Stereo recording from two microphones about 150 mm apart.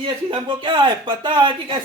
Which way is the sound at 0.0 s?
35° right (ahead or behind).